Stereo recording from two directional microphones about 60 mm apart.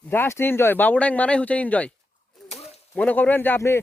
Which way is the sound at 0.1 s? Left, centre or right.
Left.